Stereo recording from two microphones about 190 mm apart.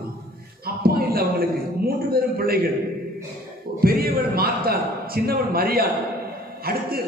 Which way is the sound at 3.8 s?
55° right (ahead or behind).